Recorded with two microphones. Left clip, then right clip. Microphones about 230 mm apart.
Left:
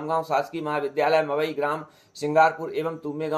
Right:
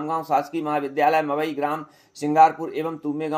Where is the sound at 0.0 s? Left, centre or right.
Right.